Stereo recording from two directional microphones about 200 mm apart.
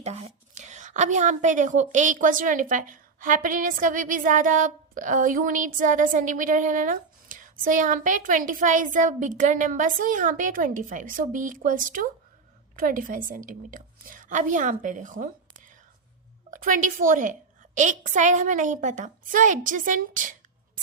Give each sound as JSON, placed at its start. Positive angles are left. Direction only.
{"t": 0.0, "sound": "a woman's voice", "side_deg": -30}